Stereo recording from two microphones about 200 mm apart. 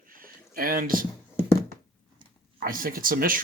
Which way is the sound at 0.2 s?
45° right (ahead or behind).